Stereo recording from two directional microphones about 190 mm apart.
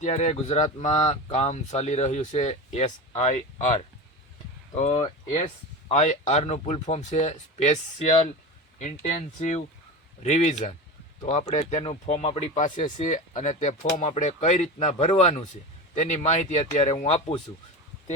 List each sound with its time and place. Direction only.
0.0 s speech: 35° left (ahead or behind)